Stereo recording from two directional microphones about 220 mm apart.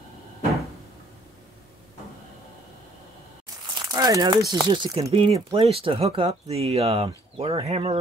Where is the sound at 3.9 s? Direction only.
15° right (ahead or behind).